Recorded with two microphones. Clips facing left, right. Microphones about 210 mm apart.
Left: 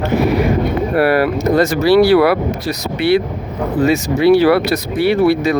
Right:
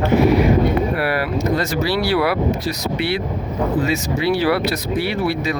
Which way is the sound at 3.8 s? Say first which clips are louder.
Left 8 dB; 60° left (ahead or behind).